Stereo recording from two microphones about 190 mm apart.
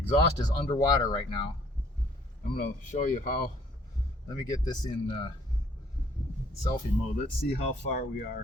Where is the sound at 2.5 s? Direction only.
45° left (ahead or behind).